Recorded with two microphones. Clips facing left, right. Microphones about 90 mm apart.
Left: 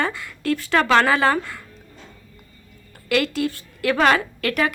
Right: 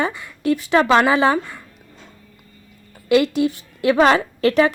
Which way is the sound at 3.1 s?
20° right (ahead or behind).